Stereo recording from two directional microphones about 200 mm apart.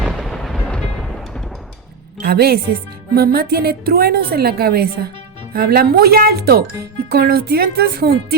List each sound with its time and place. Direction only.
0.0 s artillery fire: centre (ahead or behind)
2.2 s a woman's voice: 50° right (ahead or behind)